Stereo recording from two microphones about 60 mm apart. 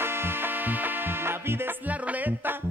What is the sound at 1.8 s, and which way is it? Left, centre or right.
Music, right.